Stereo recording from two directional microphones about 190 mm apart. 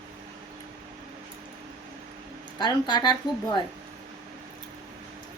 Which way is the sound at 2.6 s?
25° left (ahead or behind).